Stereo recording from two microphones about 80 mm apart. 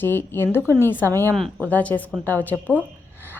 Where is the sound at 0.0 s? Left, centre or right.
Left.